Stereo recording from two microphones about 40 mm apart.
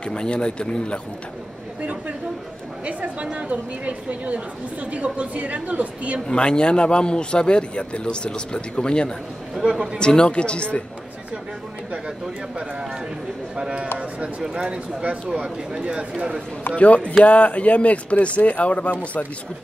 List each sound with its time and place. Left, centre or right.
0.1 s a man's voice: left
2.8 s a woman's voice: right
6.2 s a man's voice: left
13.6 s speech: right
16.7 s speech: left